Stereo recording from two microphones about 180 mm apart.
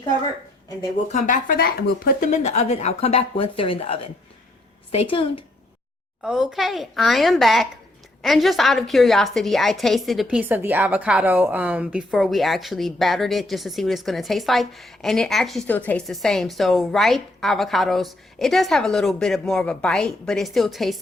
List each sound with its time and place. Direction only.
1.0 s speech: 45° left (ahead or behind)
6.2 s a woman's voice: 5° right (ahead or behind)